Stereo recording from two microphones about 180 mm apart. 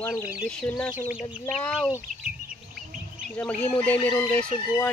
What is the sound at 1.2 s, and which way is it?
Speech, 15° left (ahead or behind).